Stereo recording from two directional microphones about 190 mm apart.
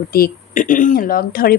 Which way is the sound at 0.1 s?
45° left (ahead or behind).